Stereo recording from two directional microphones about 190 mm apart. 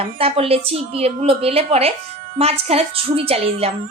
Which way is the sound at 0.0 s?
30° right (ahead or behind).